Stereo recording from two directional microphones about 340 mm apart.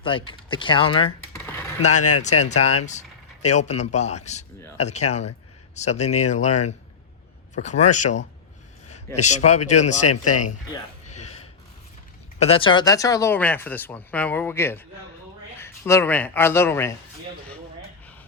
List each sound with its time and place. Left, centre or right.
0.0 s a man's voice: centre
11.0 s a sound: centre
12.4 s a man's voice: centre